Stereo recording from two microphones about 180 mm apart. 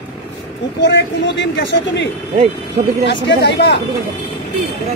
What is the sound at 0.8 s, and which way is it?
Speech, 70° left (ahead or behind).